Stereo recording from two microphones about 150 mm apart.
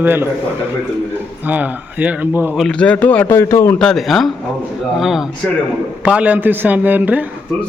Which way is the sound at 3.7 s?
5° left (ahead or behind).